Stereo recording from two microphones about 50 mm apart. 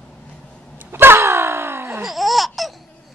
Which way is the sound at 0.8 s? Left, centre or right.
Right.